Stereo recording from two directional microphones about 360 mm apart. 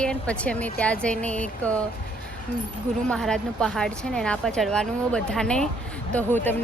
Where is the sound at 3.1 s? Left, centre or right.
Centre.